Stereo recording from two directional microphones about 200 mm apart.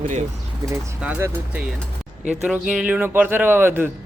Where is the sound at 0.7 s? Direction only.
10° right (ahead or behind).